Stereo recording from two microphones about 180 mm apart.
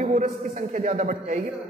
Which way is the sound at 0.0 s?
45° right (ahead or behind).